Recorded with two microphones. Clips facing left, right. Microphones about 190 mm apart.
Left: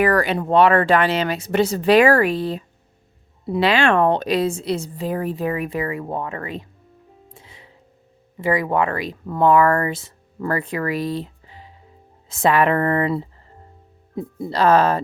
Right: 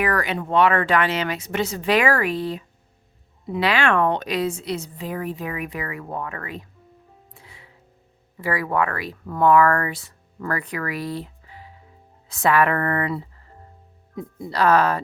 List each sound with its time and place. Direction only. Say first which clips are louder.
0.0 s a woman's voice: left 5 dB; 35° left (ahead or behind)
7.3 s music: left 2 dB; 20° left (ahead or behind)
8.4 s speech: left 3 dB; 20° left (ahead or behind)